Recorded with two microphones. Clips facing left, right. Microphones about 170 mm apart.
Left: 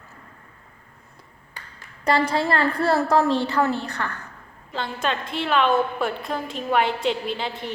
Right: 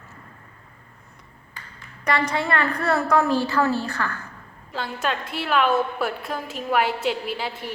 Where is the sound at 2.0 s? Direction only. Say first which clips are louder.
Left 2 dB; 30° left (ahead or behind).